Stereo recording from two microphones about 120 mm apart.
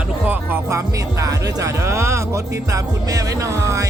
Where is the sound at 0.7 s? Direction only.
25° right (ahead or behind).